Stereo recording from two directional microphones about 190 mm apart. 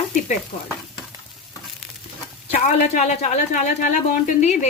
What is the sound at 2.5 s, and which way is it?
Speech, 40° left (ahead or behind).